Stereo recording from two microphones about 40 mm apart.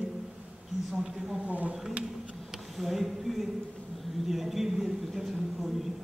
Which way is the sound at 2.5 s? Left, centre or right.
Centre.